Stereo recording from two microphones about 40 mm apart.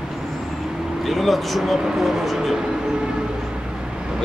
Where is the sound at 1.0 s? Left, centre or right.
Centre.